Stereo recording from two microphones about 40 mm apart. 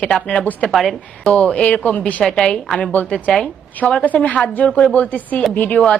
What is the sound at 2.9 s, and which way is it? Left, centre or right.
Speech, left.